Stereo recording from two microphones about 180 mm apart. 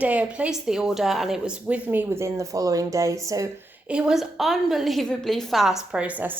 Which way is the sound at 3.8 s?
5° right (ahead or behind).